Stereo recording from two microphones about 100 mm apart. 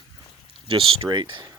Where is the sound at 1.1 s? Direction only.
50° right (ahead or behind).